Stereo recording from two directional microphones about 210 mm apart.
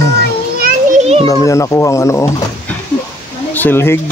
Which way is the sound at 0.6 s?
40° right (ahead or behind).